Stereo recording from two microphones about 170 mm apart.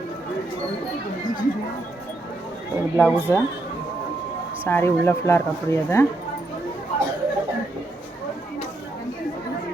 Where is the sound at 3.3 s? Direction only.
15° left (ahead or behind).